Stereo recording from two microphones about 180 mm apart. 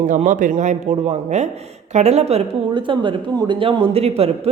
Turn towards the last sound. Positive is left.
turn(degrees=-35)  # may be behind; listen again after turning